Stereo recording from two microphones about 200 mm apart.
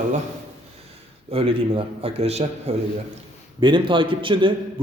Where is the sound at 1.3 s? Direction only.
30° right (ahead or behind).